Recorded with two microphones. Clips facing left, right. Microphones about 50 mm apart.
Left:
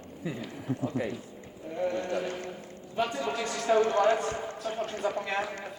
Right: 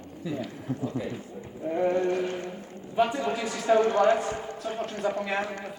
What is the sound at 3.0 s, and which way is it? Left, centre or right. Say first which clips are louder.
A man's voice: right 4 dB; centre.